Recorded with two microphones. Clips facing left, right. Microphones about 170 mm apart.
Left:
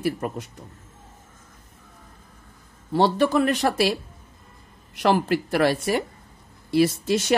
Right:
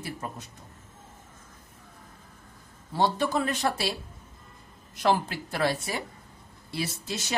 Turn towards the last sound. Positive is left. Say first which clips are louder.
# left 13 dB
turn(degrees=55)  # may be behind; listen again after turning